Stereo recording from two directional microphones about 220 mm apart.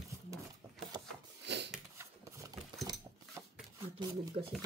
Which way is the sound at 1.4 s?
50° right (ahead or behind).